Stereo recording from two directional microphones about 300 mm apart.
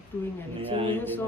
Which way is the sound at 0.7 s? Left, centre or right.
Centre.